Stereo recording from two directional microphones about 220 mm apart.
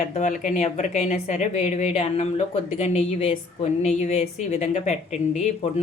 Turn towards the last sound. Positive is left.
turn(degrees=30)  # may be behind; listen again after turning